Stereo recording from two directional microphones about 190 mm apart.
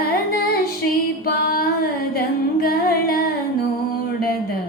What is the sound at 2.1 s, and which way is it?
Humming, 50° left (ahead or behind).